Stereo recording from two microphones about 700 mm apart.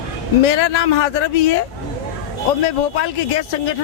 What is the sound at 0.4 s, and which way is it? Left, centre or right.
A man's voice, left.